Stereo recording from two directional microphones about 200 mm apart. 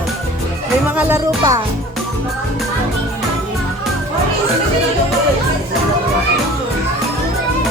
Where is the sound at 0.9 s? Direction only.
10° right (ahead or behind).